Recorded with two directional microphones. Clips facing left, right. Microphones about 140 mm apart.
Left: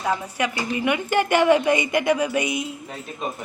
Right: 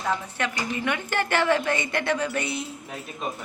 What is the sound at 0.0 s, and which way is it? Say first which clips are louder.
A woman's voice: left 3 dB; 10° left (ahead or behind).